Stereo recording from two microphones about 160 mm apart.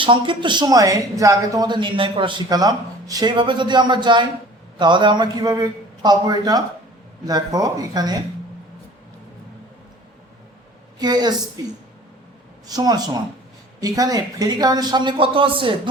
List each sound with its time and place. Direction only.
0.0 s speech: 30° right (ahead or behind)
11.0 s speech: 25° right (ahead or behind)
12.6 s speech: 25° right (ahead or behind)